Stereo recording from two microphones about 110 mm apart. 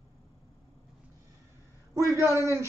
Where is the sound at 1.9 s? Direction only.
25° right (ahead or behind).